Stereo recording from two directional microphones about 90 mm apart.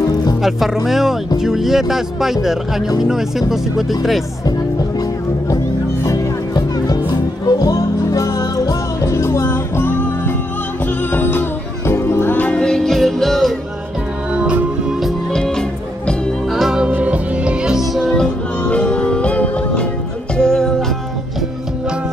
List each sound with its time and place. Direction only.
0.1 s music: 45° left (ahead or behind)
0.4 s speech: centre (ahead or behind)
6.0 s music: 45° left (ahead or behind); by 13.6 s centre (ahead or behind)
14.3 s music: 10° right (ahead or behind); by 20.7 s 5° left (ahead or behind)